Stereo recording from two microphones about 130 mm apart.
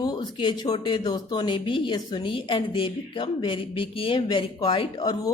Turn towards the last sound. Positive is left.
turn(degrees=30)  # may be behind; listen again after turning